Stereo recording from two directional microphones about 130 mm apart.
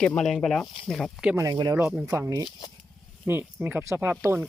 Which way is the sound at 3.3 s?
15° right (ahead or behind).